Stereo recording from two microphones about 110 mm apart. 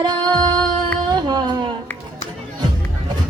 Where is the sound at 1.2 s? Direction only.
40° right (ahead or behind).